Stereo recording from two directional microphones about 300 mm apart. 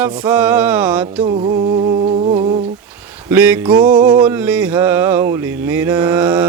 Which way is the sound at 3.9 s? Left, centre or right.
Centre.